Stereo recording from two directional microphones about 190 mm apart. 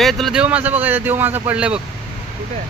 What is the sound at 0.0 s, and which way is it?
Speech, centre (ahead or behind).